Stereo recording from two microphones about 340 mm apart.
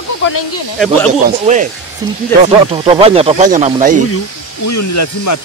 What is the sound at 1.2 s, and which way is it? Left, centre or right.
Speech, right.